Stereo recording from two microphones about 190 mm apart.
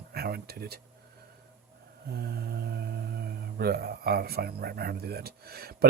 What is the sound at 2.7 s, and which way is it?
Speech, 55° right (ahead or behind).